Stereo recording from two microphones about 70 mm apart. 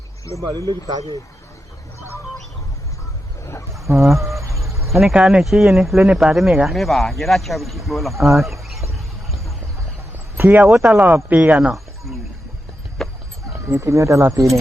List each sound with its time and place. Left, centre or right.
0.4 s speech: right
3.8 s chicken: right
4.2 s a sound: right
4.9 s speech: centre
10.3 s a man's voice: right
10.8 s speech: centre
13.0 s a sound: centre
13.7 s speech: right